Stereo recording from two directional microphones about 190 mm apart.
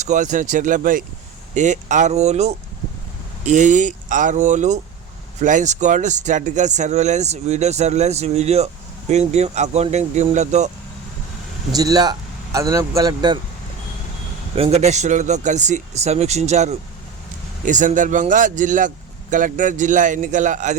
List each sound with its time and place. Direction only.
0.0 s a man's voice: 40° right (ahead or behind)
11.7 s speech: 20° right (ahead or behind)
14.5 s a man's voice: 30° right (ahead or behind)